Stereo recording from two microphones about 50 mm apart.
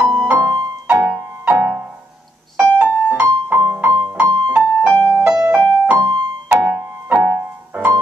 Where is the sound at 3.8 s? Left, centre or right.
Right.